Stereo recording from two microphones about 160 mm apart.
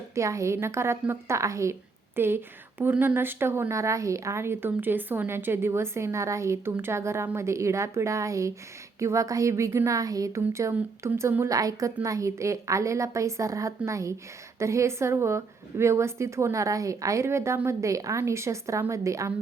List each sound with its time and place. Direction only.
0.1 s a woman's voice: 20° right (ahead or behind)